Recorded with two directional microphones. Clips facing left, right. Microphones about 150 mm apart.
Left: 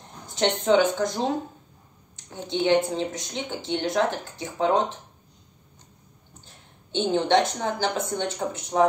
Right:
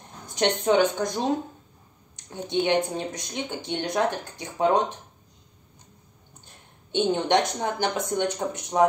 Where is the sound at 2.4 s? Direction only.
15° right (ahead or behind).